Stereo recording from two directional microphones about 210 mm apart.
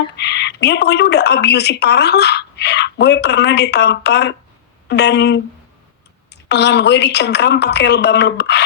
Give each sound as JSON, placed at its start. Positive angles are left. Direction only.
{"t": 0.2, "sound": "a woman's voice", "side_deg": 55}